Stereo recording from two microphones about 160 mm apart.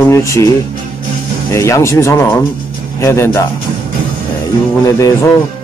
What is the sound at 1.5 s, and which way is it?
Speech, 20° left (ahead or behind).